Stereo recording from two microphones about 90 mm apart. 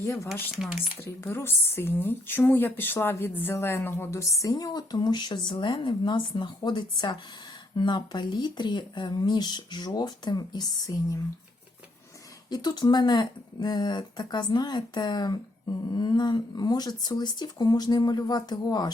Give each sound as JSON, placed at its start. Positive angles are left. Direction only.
{"t": 0.0, "sound": "speech", "side_deg": 30}
{"t": 0.5, "sound": "speech", "side_deg": -5}
{"t": 0.9, "sound": "speech", "side_deg": 30}
{"t": 12.5, "sound": "speech", "side_deg": 50}